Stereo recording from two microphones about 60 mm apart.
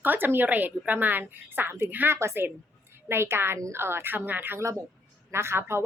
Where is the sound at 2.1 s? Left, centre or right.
Right.